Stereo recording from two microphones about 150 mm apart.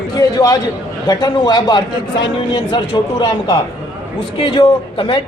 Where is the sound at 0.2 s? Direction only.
25° left (ahead or behind).